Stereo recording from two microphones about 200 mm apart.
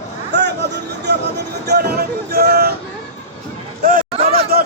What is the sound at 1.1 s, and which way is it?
Speech, 60° right (ahead or behind).